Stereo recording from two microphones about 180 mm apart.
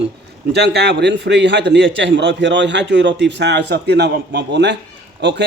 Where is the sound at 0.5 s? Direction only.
70° right (ahead or behind).